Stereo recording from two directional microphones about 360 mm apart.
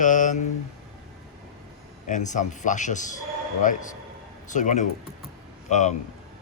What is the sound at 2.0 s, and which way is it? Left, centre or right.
Speech, left.